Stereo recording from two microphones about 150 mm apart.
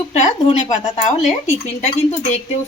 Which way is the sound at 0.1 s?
45° left (ahead or behind).